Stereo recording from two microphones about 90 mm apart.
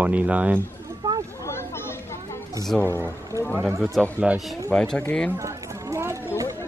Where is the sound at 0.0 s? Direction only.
15° right (ahead or behind).